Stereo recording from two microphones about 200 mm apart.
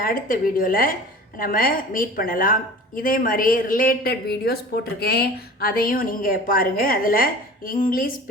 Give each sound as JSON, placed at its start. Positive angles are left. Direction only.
{"t": 0.0, "sound": "a woman's voice", "side_deg": 45}